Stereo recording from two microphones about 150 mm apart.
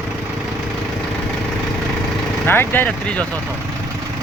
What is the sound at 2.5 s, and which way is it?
Speech, 15° left (ahead or behind).